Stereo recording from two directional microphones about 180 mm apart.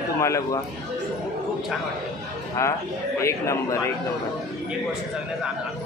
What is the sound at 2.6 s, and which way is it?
Speech, 15° left (ahead or behind).